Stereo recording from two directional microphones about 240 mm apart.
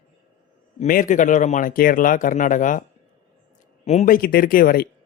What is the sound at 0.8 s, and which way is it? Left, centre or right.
Speech, left.